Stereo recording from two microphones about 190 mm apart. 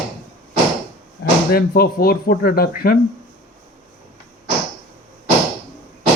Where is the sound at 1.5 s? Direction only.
50° left (ahead or behind).